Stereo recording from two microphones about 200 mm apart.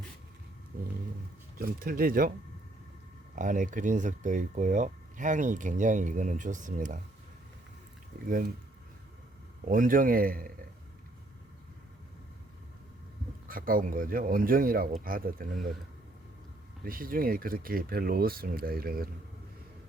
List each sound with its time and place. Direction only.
0.7 s roaring cats: 45° right (ahead or behind)
1.5 s speech: 45° right (ahead or behind)
3.3 s speech: 40° right (ahead or behind)
8.3 s speech: 45° right (ahead or behind)
9.6 s speech: 45° right (ahead or behind)
13.5 s speech: 45° right (ahead or behind)
16.8 s speech: 45° right (ahead or behind)